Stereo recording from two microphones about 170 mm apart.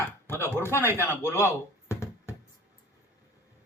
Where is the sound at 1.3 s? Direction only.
15° left (ahead or behind).